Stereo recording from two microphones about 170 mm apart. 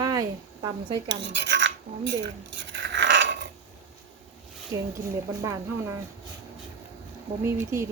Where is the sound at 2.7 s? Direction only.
90° right.